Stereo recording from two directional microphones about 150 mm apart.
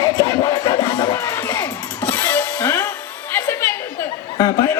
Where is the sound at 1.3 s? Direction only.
15° left (ahead or behind).